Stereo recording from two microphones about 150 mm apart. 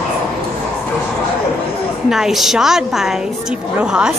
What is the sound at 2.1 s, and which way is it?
A woman's voice, centre (ahead or behind).